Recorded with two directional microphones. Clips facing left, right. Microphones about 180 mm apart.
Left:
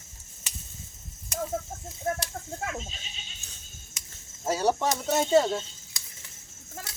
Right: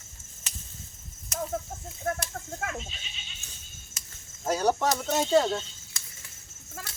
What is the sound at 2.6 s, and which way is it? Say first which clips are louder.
Speech: left 1 dB; 35° left (ahead or behind).